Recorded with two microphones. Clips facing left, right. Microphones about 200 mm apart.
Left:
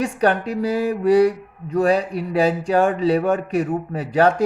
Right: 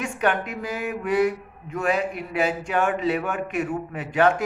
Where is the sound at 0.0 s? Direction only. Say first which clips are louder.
Left 5 dB; 35° left (ahead or behind).